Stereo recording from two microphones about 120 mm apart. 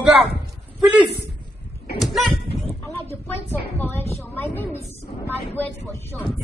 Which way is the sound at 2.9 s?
20° left (ahead or behind).